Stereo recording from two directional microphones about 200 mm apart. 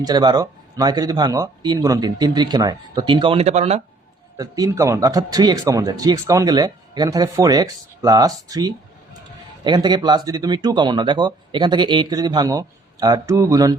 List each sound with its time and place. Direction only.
0.0 s speech: 20° right (ahead or behind)
4.4 s speech: 20° right (ahead or behind)